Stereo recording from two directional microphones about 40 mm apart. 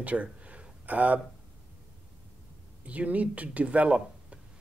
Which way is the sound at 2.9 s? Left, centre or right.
Right.